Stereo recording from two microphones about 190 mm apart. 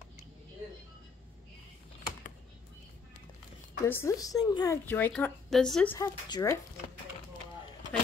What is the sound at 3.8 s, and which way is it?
A woman's voice, 15° left (ahead or behind).